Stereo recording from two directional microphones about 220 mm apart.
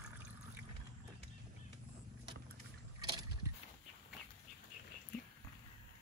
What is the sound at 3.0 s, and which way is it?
Boat, 20° right (ahead or behind).